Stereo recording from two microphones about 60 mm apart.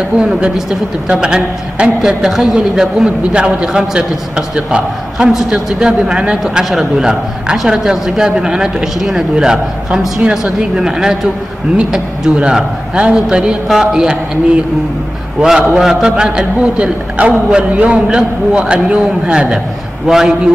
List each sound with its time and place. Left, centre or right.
0.2 s a man's voice: centre
12.4 s a man's voice: centre
15.4 s a man's voice: centre